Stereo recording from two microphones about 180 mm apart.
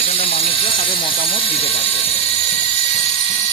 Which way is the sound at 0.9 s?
30° left (ahead or behind).